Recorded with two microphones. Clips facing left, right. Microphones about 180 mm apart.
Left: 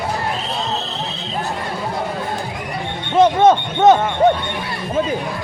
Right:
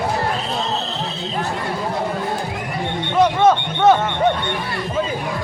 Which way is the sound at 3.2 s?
25° left (ahead or behind).